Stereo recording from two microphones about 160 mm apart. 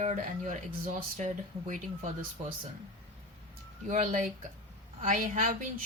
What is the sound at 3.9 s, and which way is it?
Speech, 55° right (ahead or behind).